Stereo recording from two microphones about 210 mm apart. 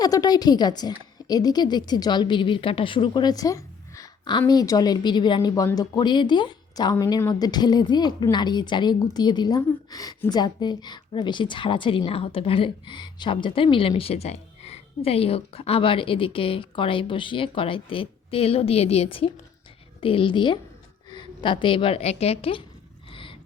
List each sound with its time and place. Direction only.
0.0 s a woman's voice: 20° left (ahead or behind)